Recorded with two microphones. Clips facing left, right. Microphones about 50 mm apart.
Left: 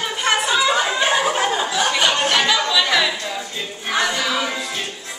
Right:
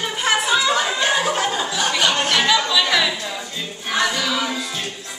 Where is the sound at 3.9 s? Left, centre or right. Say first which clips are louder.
Even; centre.